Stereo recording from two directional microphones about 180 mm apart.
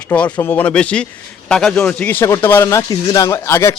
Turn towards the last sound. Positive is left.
turn(degrees=15)  # may be behind; listen again after turning